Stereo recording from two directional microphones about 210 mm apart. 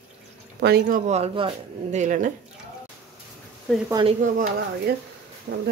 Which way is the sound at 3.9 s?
20° right (ahead or behind).